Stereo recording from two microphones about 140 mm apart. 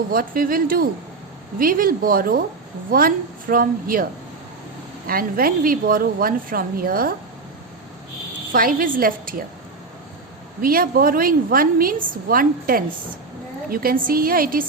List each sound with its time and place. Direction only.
0.1 s a woman's voice: 90° right
5.0 s a woman's voice: 90° right
8.5 s a woman's voice: 90° right
10.6 s a woman's voice: 90° right